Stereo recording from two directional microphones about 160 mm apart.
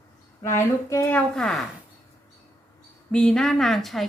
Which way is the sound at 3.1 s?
5° left (ahead or behind).